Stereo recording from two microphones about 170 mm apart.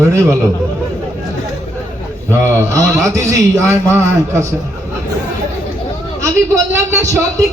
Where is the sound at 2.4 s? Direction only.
15° right (ahead or behind).